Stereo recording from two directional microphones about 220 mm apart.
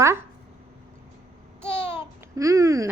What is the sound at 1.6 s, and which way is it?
Babbling, 10° right (ahead or behind).